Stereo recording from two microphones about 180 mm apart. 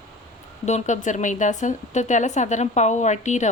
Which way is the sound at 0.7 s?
40° left (ahead or behind).